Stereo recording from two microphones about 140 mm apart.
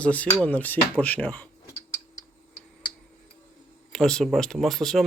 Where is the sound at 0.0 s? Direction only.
10° left (ahead or behind).